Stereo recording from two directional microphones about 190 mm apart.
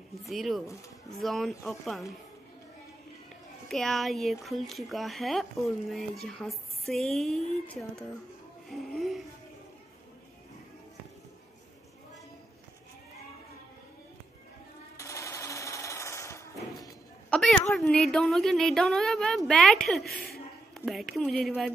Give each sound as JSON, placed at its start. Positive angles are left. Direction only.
{"t": 0.2, "sound": "speech", "side_deg": 0}
{"t": 3.6, "sound": "speech", "side_deg": 0}
{"t": 15.0, "sound": "sewing machine", "side_deg": 15}
{"t": 17.3, "sound": "a woman's voice", "side_deg": 5}